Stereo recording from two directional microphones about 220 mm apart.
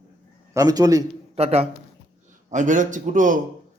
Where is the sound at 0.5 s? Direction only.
15° right (ahead or behind).